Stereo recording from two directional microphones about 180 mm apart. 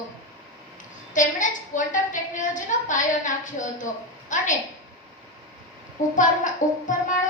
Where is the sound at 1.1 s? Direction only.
45° left (ahead or behind).